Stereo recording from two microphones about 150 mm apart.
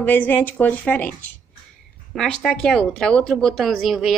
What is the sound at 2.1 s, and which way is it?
Speech, 5° left (ahead or behind).